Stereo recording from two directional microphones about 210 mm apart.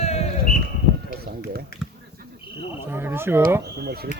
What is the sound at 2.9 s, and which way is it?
Speech, 10° right (ahead or behind).